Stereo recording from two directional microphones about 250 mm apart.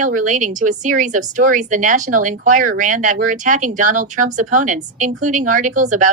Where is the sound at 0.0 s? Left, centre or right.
Right.